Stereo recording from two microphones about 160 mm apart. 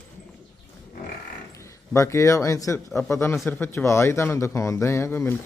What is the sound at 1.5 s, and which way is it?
Speech, 20° left (ahead or behind).